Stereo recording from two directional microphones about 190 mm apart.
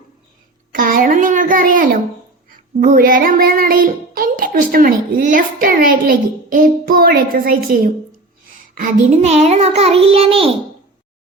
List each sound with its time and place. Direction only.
0.7 s a sound: 45° right (ahead or behind)
2.5 s child singing: 50° right (ahead or behind)
8.7 s a child's voice: 45° right (ahead or behind)